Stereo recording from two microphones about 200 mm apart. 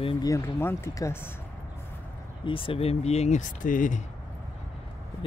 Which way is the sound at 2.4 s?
25° left (ahead or behind).